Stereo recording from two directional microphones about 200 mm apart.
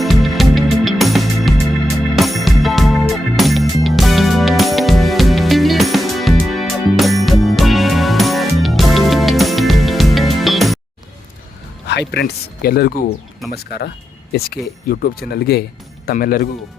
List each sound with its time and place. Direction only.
0.0 s music: centre (ahead or behind)
11.9 s speech: 55° left (ahead or behind)